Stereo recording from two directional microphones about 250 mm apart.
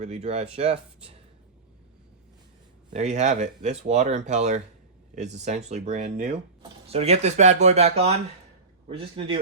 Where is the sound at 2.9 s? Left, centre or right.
Right.